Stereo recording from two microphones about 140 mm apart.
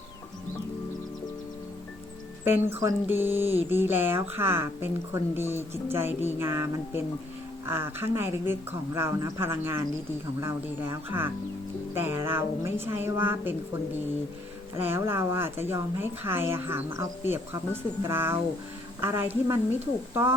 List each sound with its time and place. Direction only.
2.4 s speech: 15° right (ahead or behind)
14.8 s speech: 15° right (ahead or behind)